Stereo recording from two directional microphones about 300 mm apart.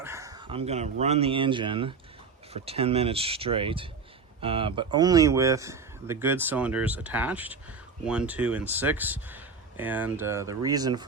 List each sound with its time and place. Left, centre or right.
0.0 s speech: centre